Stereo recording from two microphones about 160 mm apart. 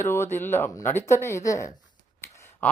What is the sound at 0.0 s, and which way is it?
Speech, 15° left (ahead or behind).